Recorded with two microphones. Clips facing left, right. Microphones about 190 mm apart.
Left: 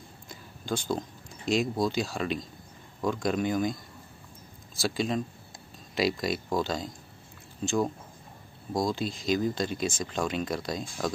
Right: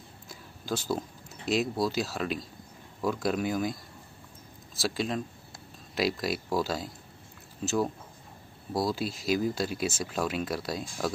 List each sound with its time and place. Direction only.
0.3 s speech: 5° right (ahead or behind)
4.7 s speech: centre (ahead or behind)